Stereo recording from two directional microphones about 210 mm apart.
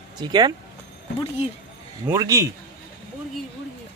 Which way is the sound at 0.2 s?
20° right (ahead or behind).